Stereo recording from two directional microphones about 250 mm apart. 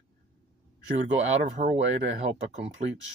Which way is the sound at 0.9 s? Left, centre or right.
Right.